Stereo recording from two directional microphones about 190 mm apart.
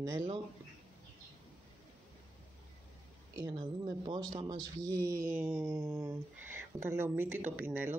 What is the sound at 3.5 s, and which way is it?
A man's voice, 30° right (ahead or behind).